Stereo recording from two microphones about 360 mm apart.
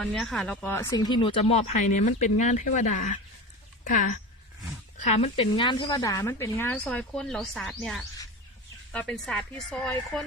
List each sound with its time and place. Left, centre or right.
0.0 s a woman's voice: centre
4.9 s a woman's voice: centre